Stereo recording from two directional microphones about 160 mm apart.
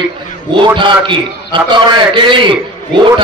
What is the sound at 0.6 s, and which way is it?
A man's voice, 30° right (ahead or behind).